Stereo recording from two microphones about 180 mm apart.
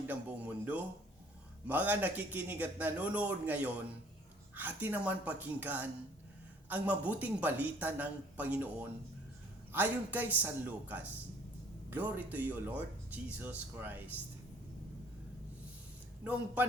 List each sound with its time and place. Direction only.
0.1 s a man's voice: 10° right (ahead or behind)
16.2 s a man's voice: 10° right (ahead or behind)